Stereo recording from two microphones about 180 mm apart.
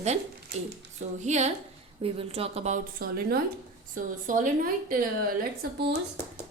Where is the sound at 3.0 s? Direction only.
60° right (ahead or behind).